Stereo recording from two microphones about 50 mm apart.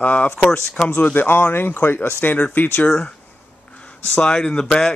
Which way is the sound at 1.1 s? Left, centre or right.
Left.